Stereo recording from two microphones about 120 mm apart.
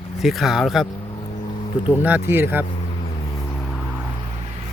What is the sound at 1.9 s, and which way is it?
Speech, 15° right (ahead or behind).